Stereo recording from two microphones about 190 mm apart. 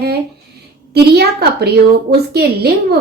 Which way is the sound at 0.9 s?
55° right (ahead or behind).